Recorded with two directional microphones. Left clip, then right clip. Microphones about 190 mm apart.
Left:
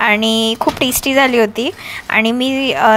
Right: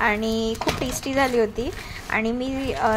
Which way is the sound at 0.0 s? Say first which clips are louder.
Left 9 dB; 25° left (ahead or behind).